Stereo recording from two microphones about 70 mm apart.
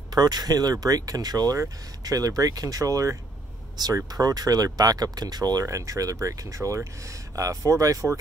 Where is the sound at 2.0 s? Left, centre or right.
Right.